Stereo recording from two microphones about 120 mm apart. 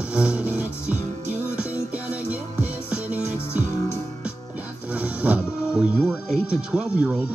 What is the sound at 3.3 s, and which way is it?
Music, 20° left (ahead or behind).